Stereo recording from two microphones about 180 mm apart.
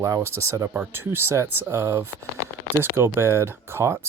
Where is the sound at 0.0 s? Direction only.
15° right (ahead or behind).